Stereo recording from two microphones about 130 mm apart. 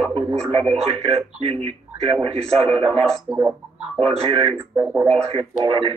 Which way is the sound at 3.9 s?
50° right (ahead or behind).